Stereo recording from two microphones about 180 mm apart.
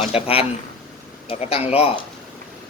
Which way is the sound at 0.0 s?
35° left (ahead or behind).